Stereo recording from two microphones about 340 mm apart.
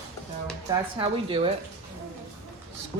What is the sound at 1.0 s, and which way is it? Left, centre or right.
Speech, centre.